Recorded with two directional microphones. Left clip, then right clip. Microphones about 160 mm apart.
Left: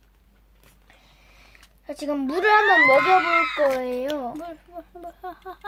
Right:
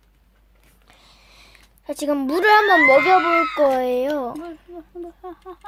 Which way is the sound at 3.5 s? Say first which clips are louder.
Right 4 dB; 55° right (ahead or behind).